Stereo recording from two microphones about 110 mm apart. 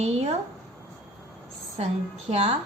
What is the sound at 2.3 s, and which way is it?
Speech, 70° right (ahead or behind).